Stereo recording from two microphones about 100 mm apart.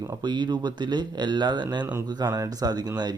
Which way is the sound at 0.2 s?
45° right (ahead or behind).